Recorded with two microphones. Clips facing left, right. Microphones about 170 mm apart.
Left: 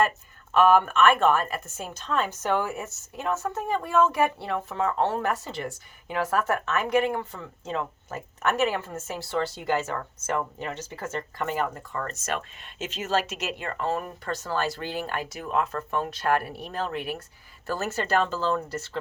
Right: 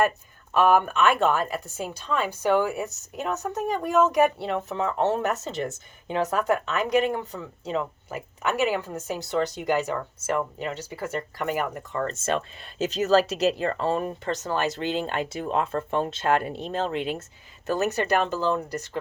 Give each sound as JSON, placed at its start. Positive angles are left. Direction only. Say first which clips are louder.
{"t": 0.5, "sound": "speech", "louder": "left 1 dB", "side_deg": -15}
{"t": 12.0, "sound": "speech", "louder": "right 7 dB", "side_deg": -30}